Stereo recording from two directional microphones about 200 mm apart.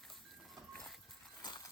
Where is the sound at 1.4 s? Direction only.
20° left (ahead or behind).